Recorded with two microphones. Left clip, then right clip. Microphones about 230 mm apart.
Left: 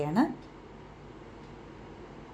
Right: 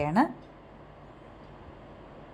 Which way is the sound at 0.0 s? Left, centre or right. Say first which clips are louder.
Right 3 dB; right.